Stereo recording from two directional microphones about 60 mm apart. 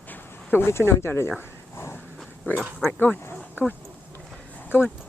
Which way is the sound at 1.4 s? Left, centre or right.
Left.